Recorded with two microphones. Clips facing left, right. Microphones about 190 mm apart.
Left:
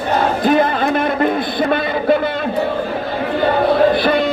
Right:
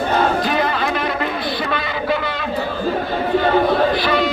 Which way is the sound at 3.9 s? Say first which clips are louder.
Left 3 dB; 55° left (ahead or behind).